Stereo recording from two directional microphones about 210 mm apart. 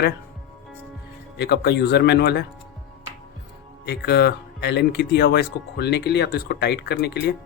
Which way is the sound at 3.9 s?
50° left (ahead or behind).